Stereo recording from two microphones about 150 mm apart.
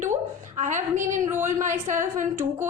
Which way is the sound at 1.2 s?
15° right (ahead or behind).